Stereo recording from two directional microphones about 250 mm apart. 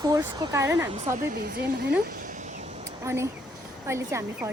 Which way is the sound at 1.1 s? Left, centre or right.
Right.